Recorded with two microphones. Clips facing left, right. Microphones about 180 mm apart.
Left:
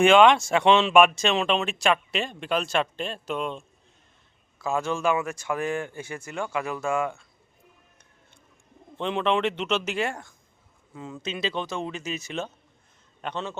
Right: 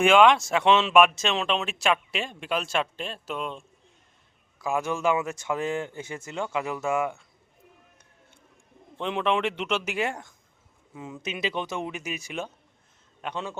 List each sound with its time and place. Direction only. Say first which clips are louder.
0.0 s speech: left 2 dB; 5° right (ahead or behind)
4.5 s speech: left 1 dB; 15° right (ahead or behind)
9.0 s speech: left 1 dB; 5° right (ahead or behind)